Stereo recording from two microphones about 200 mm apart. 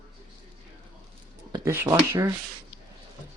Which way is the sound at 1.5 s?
15° right (ahead or behind).